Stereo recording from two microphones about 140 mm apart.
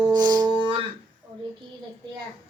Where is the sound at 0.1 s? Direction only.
30° right (ahead or behind).